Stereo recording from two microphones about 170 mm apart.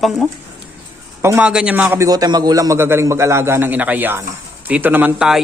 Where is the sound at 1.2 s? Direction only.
10° right (ahead or behind).